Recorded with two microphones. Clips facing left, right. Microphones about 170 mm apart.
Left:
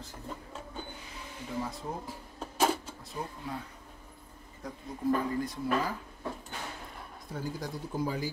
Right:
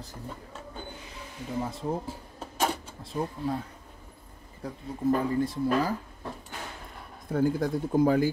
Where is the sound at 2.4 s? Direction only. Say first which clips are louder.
Left 1 dB; centre (ahead or behind).